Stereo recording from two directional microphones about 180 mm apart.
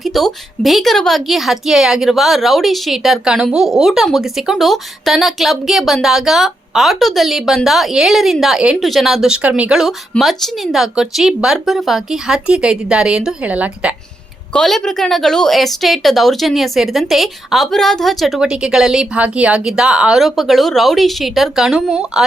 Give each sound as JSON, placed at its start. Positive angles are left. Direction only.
{"t": 0.0, "sound": "a woman's voice", "side_deg": 0}
{"t": 14.5, "sound": "a woman's voice", "side_deg": 5}